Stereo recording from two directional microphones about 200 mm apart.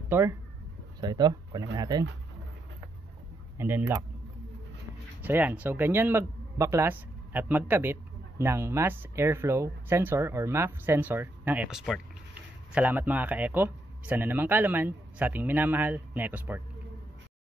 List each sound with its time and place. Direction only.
0.1 s speech: 10° right (ahead or behind)
3.5 s speech: 10° right (ahead or behind)
5.2 s speech: 10° right (ahead or behind)